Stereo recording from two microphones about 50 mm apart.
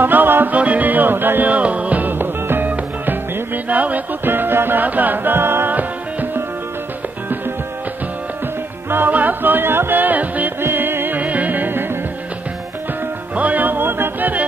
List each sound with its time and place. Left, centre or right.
0.0 s music: right
3.6 s music: right
4.2 s music: right
4.8 s music: right
8.9 s music: right
10.6 s music: right
11.1 s music: right
13.3 s music: right